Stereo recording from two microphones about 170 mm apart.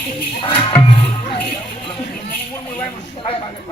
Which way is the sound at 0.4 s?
30° left (ahead or behind).